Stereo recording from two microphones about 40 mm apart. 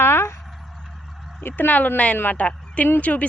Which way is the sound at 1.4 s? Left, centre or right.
Left.